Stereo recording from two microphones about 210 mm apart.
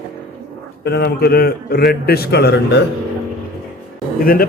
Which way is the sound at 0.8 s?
50° left (ahead or behind).